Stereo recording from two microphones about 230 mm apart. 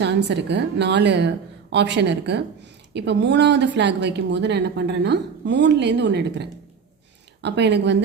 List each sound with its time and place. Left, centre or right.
0.0 s a woman's voice: right